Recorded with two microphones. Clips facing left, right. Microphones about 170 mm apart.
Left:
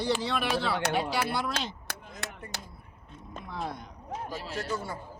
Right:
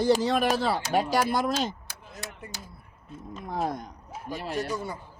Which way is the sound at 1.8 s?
65° left (ahead or behind).